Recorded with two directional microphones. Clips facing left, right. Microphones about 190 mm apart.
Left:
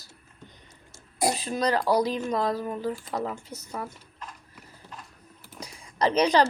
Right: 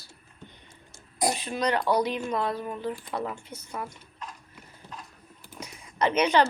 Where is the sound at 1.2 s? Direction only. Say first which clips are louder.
Left 1 dB; 35° left (ahead or behind).